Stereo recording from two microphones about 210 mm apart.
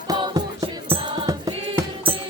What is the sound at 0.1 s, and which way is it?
Music, 20° right (ahead or behind).